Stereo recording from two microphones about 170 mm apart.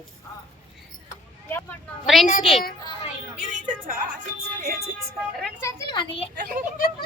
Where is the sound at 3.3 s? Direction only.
50° right (ahead or behind).